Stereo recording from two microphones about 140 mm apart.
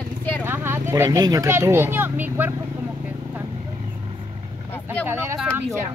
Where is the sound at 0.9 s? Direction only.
25° right (ahead or behind).